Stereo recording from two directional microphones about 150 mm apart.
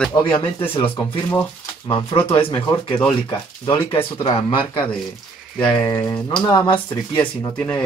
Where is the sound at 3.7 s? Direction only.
35° left (ahead or behind).